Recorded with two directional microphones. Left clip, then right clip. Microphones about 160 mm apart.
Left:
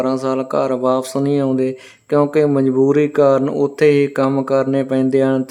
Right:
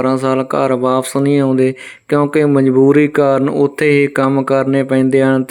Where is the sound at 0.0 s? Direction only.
20° right (ahead or behind).